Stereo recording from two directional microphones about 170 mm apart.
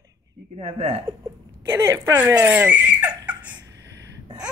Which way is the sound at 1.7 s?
15° right (ahead or behind).